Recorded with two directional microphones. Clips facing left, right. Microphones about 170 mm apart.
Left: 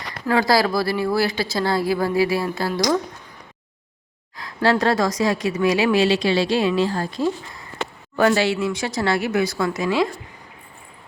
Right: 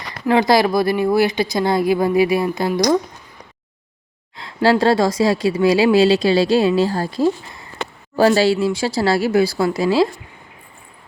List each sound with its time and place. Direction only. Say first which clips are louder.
0.3 s speech: right 4 dB; 20° right (ahead or behind)
4.4 s speech: right 4 dB; 30° right (ahead or behind)